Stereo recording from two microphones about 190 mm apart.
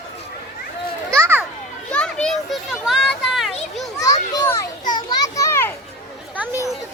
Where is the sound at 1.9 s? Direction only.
5° left (ahead or behind).